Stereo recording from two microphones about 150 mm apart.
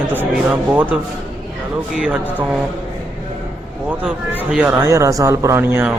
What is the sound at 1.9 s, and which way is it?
Speech, 5° right (ahead or behind).